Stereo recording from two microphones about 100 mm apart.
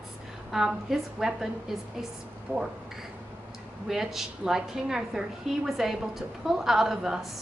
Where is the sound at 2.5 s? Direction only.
20° right (ahead or behind).